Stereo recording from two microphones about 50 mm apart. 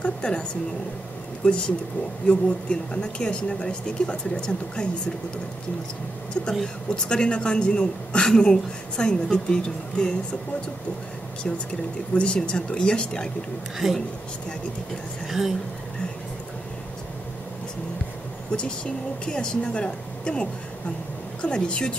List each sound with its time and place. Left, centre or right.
0.0 s a woman's voice: centre
6.6 s a woman's voice: centre
12.1 s speech: centre
13.8 s a woman's voice: centre
15.2 s speech: centre
19.2 s a woman's voice: centre